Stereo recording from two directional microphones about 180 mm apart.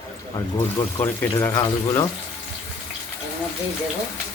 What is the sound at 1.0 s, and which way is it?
Speech, 15° left (ahead or behind).